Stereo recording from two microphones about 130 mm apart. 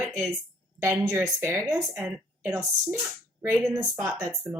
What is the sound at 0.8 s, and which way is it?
Speech, 20° right (ahead or behind).